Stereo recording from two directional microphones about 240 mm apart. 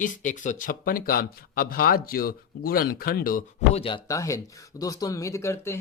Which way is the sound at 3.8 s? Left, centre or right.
Centre.